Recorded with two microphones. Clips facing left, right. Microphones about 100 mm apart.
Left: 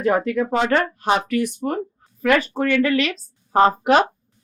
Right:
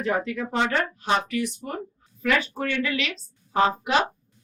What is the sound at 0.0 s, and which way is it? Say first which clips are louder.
A woman's voice: left 7 dB; 55° left (ahead or behind).